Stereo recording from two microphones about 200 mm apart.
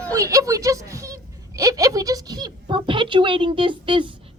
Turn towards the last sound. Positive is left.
turn(degrees=-25)  # may be behind; listen again after turning